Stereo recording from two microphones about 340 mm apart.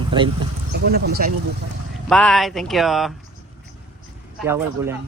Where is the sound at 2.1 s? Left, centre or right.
Centre.